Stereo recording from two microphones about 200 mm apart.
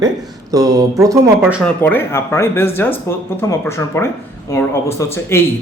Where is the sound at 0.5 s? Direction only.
15° right (ahead or behind).